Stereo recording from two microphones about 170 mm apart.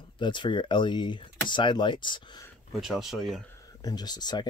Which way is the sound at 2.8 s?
Centre (ahead or behind).